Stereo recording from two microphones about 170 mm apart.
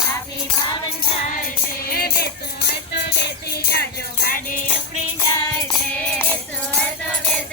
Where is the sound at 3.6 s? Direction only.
65° left (ahead or behind).